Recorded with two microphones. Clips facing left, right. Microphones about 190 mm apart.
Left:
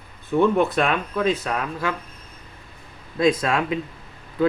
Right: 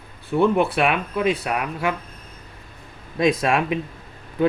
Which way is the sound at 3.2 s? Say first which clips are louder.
Even; 20° right (ahead or behind).